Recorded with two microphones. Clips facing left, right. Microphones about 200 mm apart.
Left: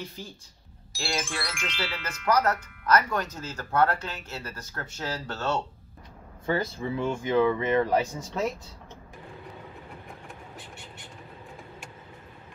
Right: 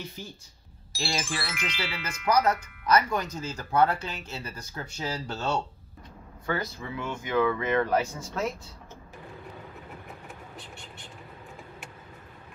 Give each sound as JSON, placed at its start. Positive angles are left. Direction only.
{"t": 1.2, "sound": "speech", "side_deg": -5}
{"t": 2.3, "sound": "speech", "side_deg": -15}
{"t": 6.4, "sound": "speech", "side_deg": 30}